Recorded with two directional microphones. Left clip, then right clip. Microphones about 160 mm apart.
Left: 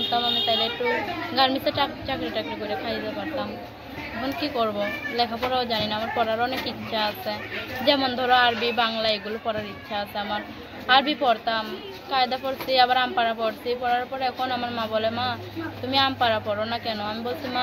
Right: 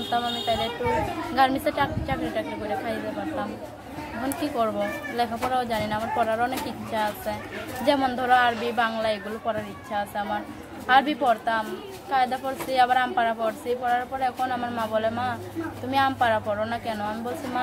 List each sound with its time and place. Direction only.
0.1 s speech: 20° right (ahead or behind)
4.6 s a woman's voice: 20° right (ahead or behind)